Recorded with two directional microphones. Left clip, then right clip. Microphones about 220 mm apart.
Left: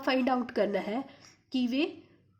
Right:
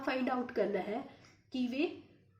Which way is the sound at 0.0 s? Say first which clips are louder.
Left 6 dB; 45° left (ahead or behind).